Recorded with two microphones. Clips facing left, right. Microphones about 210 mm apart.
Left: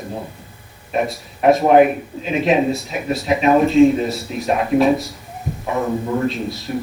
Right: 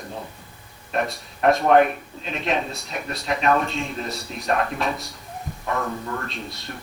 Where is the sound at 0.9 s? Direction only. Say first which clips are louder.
Left 5 dB; centre (ahead or behind).